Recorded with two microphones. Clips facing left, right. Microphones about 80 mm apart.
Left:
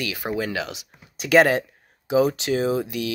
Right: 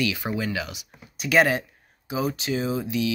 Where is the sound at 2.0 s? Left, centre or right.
Left.